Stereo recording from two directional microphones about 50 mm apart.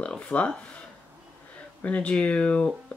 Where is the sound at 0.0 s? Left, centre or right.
Left.